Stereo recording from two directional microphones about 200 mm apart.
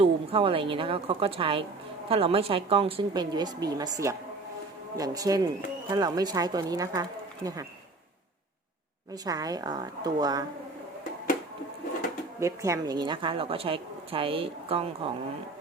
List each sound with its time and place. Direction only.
0.0 s a woman's voice: 30° right (ahead or behind)
9.2 s a woman's voice: 20° right (ahead or behind)
12.4 s a woman's voice: 15° right (ahead or behind)